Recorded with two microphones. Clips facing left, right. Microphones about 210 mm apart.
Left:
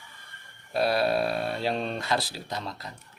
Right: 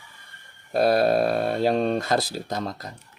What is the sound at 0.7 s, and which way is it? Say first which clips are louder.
Speech: right 5 dB; 45° right (ahead or behind).